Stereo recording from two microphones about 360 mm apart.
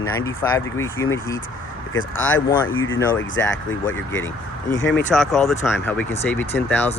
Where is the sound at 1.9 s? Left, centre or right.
Left.